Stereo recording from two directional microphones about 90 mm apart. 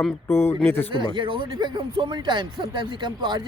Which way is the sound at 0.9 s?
65° right (ahead or behind).